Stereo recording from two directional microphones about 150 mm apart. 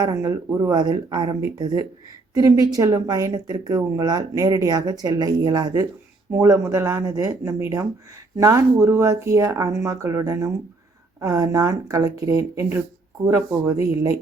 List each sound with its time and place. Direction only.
0.0 s speech: 25° right (ahead or behind)